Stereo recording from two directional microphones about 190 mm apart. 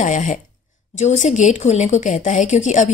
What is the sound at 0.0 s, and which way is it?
Speech, 40° left (ahead or behind).